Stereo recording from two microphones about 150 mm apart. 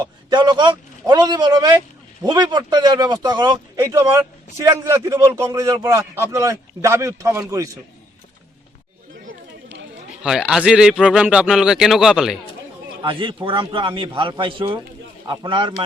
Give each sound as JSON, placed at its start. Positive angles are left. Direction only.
{"t": 0.0, "sound": "a man's voice", "side_deg": -30}
{"t": 3.8, "sound": "a man's voice", "side_deg": -20}
{"t": 10.2, "sound": "speech", "side_deg": -5}
{"t": 13.0, "sound": "a man's voice", "side_deg": -35}